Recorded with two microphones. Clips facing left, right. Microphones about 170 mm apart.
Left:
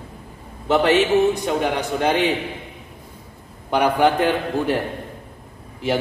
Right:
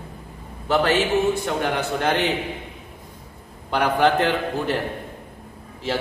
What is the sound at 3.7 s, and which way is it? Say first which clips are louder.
A man's voice: left 2 dB; 10° left (ahead or behind).